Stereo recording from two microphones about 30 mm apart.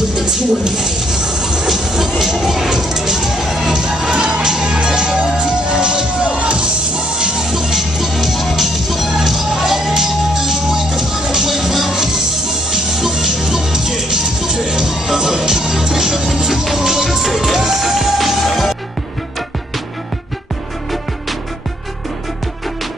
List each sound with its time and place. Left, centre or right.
0.1 s a sound: right
1.7 s speech: centre
3.7 s music: right
6.2 s music: right; by 8.1 s centre
8.1 s music: centre
11.9 s music: centre